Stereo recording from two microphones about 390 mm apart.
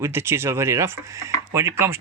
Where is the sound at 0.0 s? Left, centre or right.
Centre.